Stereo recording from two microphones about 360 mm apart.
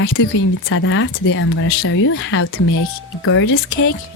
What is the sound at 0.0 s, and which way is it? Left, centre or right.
Speech, left.